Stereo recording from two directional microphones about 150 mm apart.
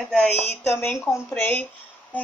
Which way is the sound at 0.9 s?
20° left (ahead or behind).